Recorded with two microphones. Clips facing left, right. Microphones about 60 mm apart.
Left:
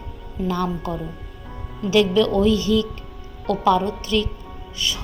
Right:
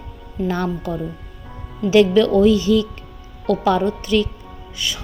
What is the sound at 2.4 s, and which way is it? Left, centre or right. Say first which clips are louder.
Speech: right 4 dB; centre.